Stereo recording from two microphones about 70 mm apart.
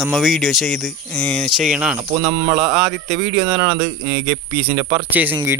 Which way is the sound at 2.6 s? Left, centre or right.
Centre.